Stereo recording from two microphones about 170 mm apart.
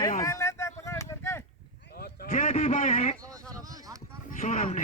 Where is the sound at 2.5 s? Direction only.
40° left (ahead or behind).